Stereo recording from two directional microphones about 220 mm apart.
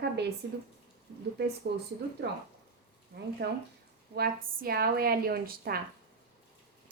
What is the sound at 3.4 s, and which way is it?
Speech, 50° right (ahead or behind).